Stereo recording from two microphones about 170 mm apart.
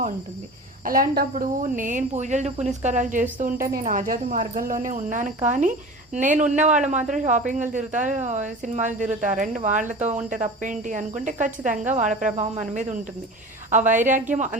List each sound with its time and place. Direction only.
0.9 s speech: 55° right (ahead or behind)